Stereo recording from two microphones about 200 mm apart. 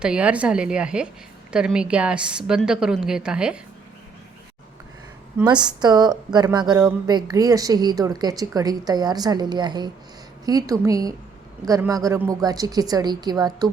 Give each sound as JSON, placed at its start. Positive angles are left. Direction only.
{"t": 0.0, "sound": "a woman's voice", "side_deg": -5}
{"t": 5.5, "sound": "a woman's voice", "side_deg": -20}